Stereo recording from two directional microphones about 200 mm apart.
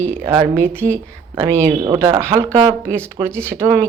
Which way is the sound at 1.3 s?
20° right (ahead or behind).